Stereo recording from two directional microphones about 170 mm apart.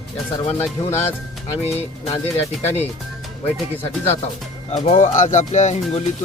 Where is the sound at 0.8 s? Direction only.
20° left (ahead or behind).